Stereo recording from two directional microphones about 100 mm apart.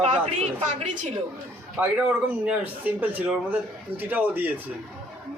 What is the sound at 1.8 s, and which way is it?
Speech, 15° right (ahead or behind).